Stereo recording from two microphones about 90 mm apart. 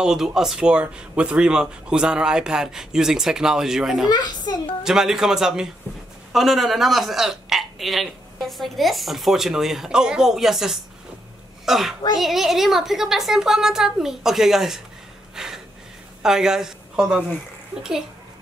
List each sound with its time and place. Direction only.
0.0 s speech: 5° right (ahead or behind)
4.1 s a child's voice: 50° left (ahead or behind)
4.8 s a child's voice: 5° right (ahead or behind)
15.3 s a sound: 5° right (ahead or behind)
16.2 s a woman's voice: 5° right (ahead or behind)